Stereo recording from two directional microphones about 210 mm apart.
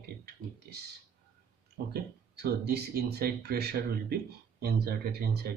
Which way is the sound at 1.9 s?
50° right (ahead or behind).